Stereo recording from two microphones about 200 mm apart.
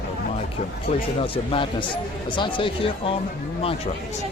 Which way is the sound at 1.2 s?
25° left (ahead or behind).